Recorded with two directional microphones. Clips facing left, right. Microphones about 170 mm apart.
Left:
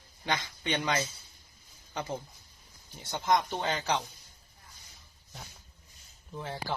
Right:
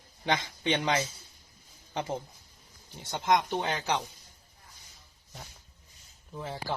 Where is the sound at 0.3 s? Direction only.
20° right (ahead or behind).